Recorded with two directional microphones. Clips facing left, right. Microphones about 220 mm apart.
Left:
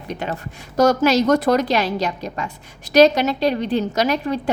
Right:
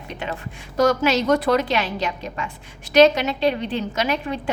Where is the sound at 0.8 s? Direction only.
40° left (ahead or behind).